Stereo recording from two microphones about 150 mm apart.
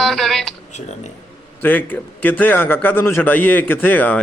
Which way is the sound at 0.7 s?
50° left (ahead or behind).